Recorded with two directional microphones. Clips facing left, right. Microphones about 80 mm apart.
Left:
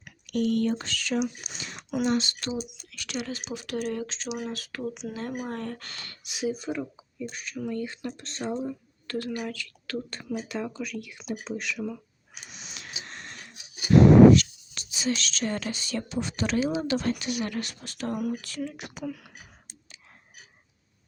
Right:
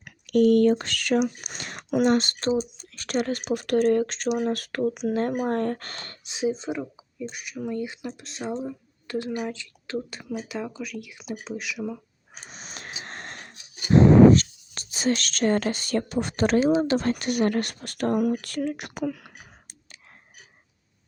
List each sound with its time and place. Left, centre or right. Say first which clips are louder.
0.0 s speech: right 8 dB; right; by 8.5 s centre
8.6 s a sound: even; centre
9.5 s speech: right 3 dB; right
10.1 s speech: even; centre
12.3 s wheeze: right 3 dB; right
13.6 s a sound: left 1 dB; centre
13.9 s speech: even; right